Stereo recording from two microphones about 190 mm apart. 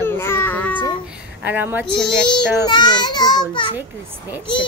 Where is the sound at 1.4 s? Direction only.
10° right (ahead or behind).